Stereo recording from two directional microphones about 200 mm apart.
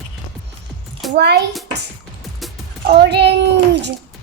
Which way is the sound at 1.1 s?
55° right (ahead or behind).